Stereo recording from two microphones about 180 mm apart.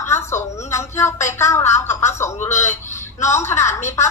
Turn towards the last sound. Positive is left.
turn(degrees=15)  # may be behind; listen again after turning